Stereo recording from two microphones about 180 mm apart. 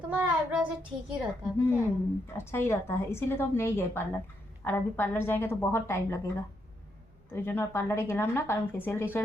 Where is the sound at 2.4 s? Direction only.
15° left (ahead or behind).